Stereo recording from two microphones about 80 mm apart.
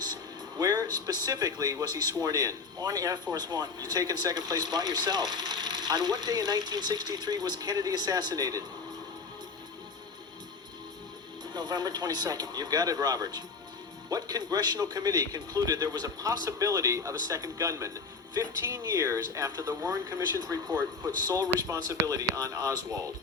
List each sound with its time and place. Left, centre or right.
0.6 s a man's voice: right
11.5 s a man's voice: right